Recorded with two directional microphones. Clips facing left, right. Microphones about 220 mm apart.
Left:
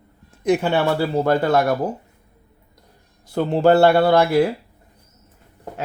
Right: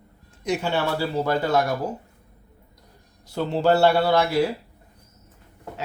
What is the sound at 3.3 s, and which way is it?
A man's voice, 55° left (ahead or behind).